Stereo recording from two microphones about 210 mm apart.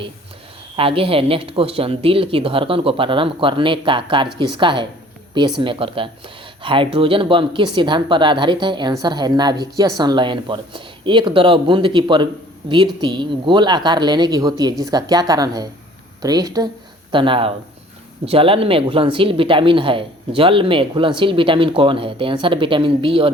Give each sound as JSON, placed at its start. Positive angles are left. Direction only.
{"t": 0.8, "sound": "speech", "side_deg": -25}